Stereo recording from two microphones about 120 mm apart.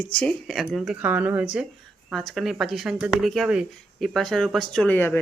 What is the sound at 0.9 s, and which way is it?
Speech, 15° right (ahead or behind).